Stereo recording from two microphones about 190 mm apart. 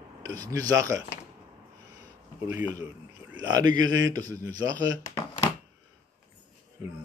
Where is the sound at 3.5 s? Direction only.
20° right (ahead or behind).